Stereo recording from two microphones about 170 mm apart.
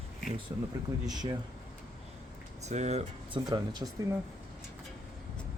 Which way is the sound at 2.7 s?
40° right (ahead or behind).